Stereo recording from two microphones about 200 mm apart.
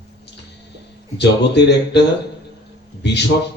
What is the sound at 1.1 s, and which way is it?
Speech, 60° left (ahead or behind).